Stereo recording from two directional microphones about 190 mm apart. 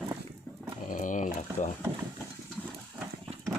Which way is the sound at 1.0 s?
40° left (ahead or behind).